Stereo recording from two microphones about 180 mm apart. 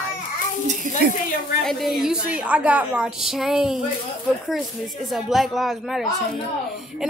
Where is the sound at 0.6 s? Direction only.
50° right (ahead or behind).